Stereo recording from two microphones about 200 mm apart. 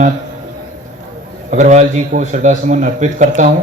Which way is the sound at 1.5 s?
35° right (ahead or behind).